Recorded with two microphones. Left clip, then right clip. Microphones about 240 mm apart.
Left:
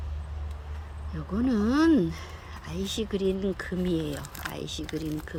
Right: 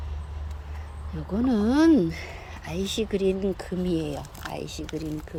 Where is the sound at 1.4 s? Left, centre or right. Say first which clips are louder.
Right 3 dB; centre.